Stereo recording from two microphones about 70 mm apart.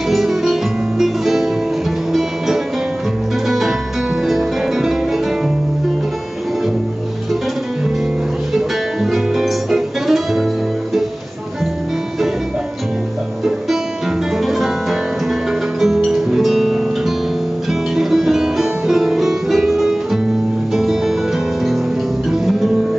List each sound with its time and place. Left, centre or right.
0.1 s music: centre
8.5 s music: centre
14.4 s music: centre